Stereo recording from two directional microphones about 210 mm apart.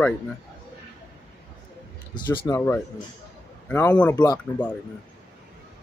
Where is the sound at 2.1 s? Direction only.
20° left (ahead or behind).